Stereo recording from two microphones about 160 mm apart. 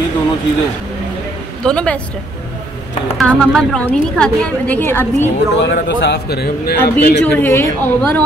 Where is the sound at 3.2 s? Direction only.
5° left (ahead or behind).